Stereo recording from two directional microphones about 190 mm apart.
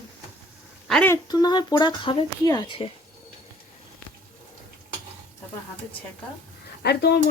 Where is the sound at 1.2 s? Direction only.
20° left (ahead or behind).